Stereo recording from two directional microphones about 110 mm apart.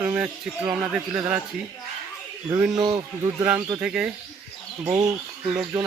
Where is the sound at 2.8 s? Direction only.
35° right (ahead or behind).